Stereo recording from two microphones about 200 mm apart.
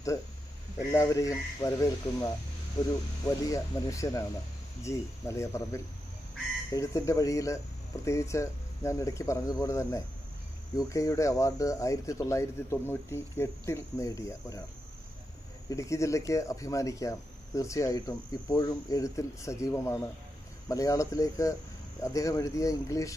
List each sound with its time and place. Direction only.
0.9 s speech: 15° left (ahead or behind)
15.7 s speech: 15° left (ahead or behind)